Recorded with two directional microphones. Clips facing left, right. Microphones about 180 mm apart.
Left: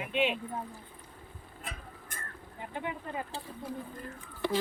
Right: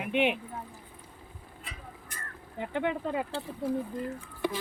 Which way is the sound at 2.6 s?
70° right (ahead or behind).